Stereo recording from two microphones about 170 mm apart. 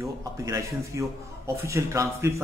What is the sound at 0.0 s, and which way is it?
Speech, 20° right (ahead or behind).